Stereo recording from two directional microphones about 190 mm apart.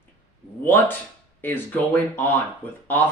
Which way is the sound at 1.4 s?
10° left (ahead or behind).